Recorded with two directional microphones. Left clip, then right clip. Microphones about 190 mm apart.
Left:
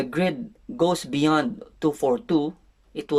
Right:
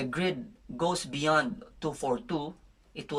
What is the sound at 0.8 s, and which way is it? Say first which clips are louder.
Speech: left 8 dB; 45° left (ahead or behind).